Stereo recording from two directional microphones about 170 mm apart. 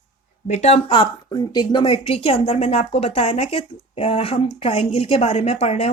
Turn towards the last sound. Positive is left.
turn(degrees=35)  # may be behind; listen again after turning